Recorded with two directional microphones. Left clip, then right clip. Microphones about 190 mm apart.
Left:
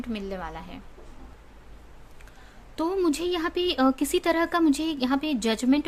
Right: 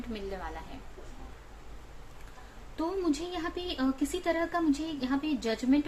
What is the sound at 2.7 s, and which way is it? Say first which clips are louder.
A woman's voice: left 6 dB; 65° left (ahead or behind).